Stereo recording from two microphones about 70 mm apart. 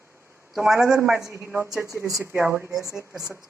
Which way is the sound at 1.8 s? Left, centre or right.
Right.